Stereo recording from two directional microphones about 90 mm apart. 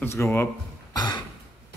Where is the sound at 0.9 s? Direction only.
55° left (ahead or behind).